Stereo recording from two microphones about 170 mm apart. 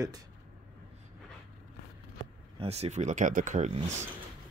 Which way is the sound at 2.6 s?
40° right (ahead or behind).